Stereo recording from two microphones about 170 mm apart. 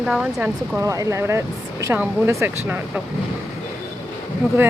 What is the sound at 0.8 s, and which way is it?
Speech, 20° right (ahead or behind).